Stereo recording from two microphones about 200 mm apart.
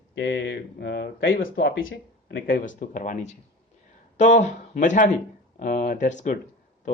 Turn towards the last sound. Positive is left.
turn(degrees=40)  # may be behind; listen again after turning